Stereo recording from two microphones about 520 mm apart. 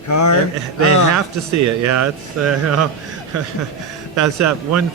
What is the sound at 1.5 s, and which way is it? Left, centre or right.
Speech, right.